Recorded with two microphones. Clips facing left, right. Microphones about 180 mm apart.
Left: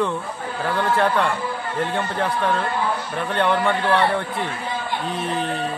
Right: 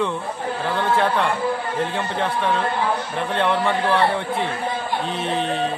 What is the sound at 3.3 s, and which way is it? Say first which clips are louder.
Speech: left 1 dB; centre (ahead or behind).